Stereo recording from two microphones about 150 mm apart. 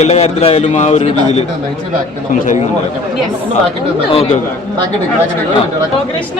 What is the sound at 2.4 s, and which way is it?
Speech, 60° left (ahead or behind).